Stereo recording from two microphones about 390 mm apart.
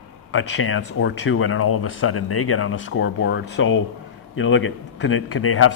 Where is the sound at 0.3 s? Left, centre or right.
Left.